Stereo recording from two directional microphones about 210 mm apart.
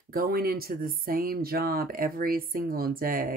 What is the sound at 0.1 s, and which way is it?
Speech, 45° right (ahead or behind).